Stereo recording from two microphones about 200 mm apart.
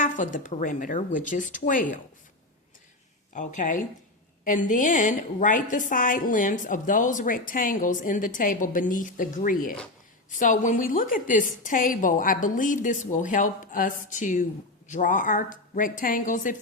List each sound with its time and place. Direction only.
0.0 s a woman's voice: 40° left (ahead or behind)
3.3 s a woman's voice: 40° left (ahead or behind)